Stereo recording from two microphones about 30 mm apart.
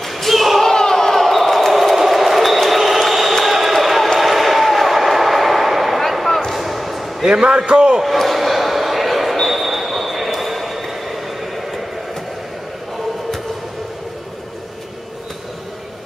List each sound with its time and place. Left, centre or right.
0.3 s a sound: centre
0.6 s basketball bounce: centre
2.0 s a sound: centre
6.5 s basketball bounce: centre
7.2 s a man's voice: right
8.0 s basketball bounce: centre